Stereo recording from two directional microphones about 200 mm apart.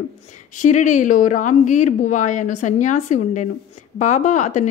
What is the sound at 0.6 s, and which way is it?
Speech, 40° left (ahead or behind).